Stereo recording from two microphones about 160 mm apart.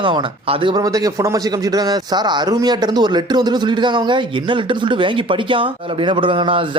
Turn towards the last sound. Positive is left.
turn(degrees=-30)  # may be behind; listen again after turning